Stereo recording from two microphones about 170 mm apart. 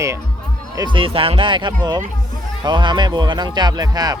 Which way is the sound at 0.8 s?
30° right (ahead or behind).